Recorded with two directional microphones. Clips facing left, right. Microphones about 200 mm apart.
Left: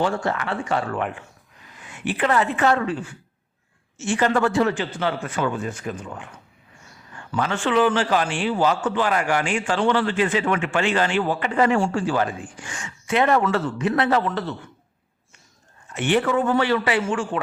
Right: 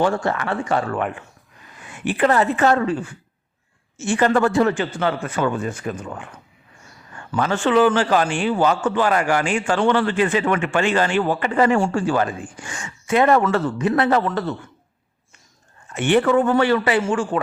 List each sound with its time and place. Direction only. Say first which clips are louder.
0.0 s a man's voice: right 3 dB; 50° right (ahead or behind)
7.3 s a man's voice: right 3 dB; 40° right (ahead or behind)
16.0 s a man's voice: right 4 dB; 50° right (ahead or behind)